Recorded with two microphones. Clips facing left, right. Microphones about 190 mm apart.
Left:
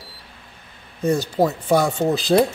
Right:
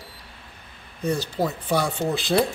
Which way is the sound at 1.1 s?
45° left (ahead or behind).